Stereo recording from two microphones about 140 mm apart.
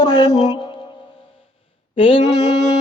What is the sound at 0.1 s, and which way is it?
Music, 30° left (ahead or behind).